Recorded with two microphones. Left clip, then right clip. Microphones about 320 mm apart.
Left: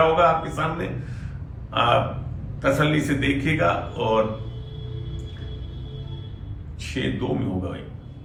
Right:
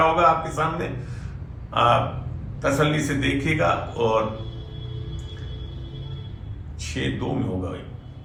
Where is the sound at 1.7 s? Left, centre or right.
Centre.